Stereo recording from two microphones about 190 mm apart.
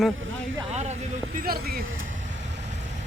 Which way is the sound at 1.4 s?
50° right (ahead or behind).